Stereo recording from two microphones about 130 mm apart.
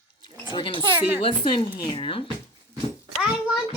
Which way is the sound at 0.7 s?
40° right (ahead or behind).